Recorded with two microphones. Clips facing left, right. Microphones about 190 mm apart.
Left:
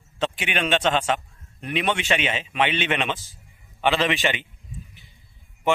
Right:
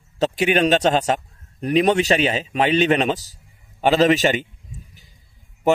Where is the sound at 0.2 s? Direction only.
40° right (ahead or behind).